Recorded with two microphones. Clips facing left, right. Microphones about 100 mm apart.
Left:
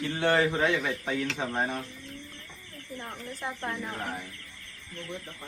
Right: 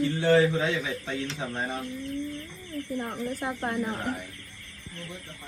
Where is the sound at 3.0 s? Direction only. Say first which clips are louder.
Right 4 dB; 50° right (ahead or behind).